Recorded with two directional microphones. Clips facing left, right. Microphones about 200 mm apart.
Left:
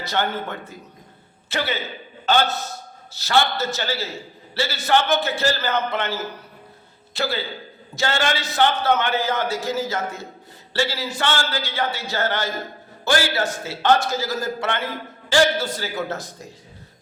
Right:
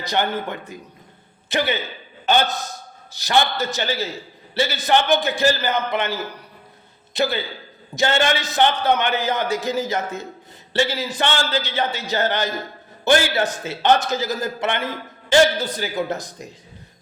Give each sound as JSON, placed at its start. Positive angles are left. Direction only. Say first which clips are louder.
{"t": 0.0, "sound": "a man's voice", "louder": "right 2 dB", "side_deg": -15}